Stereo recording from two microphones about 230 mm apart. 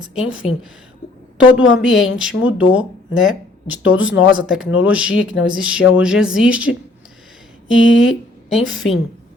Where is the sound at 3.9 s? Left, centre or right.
Left.